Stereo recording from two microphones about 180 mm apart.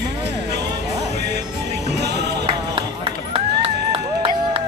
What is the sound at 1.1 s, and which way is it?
Music, 65° right (ahead or behind).